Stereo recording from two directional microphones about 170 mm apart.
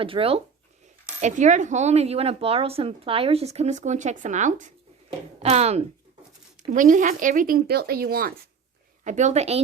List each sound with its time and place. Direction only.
0.0 s speech: 35° right (ahead or behind)
1.2 s speech: 45° right (ahead or behind)
6.7 s speech: 50° right (ahead or behind)
9.0 s speech: 45° right (ahead or behind)